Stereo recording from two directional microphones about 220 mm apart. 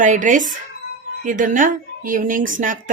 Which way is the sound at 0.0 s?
35° right (ahead or behind).